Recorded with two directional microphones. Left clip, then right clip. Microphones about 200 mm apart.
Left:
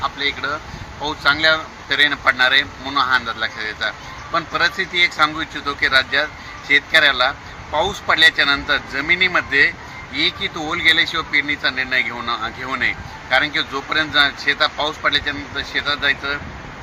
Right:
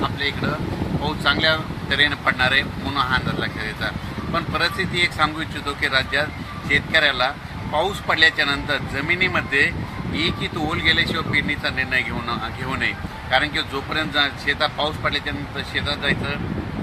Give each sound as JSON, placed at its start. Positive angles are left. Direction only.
{"t": 0.0, "sound": "speech", "side_deg": -5}